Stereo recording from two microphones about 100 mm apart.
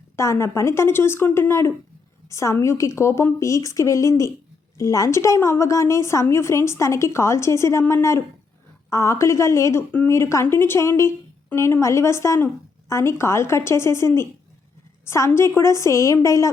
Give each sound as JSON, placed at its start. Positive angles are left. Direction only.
{"t": 0.2, "sound": "a woman's voice", "side_deg": 30}